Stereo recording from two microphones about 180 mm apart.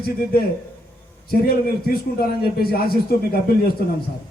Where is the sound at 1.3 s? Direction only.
55° left (ahead or behind).